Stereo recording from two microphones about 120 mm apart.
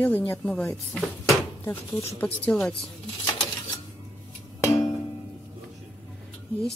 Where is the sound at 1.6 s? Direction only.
20° left (ahead or behind).